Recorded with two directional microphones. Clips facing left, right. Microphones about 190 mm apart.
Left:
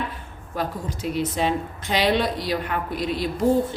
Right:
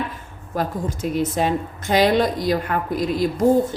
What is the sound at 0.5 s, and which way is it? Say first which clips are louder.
A woman's voice: right 4 dB; 45° right (ahead or behind).